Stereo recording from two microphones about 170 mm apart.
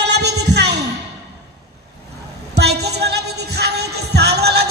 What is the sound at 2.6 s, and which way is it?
Music, 75° right (ahead or behind).